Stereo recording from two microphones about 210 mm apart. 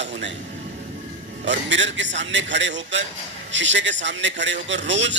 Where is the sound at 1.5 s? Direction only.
60° right (ahead or behind).